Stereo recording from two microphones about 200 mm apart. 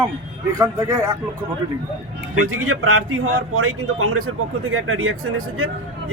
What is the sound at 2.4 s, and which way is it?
A man's voice, 90° right.